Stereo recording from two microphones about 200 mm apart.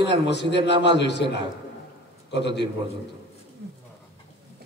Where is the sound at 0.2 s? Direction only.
60° left (ahead or behind).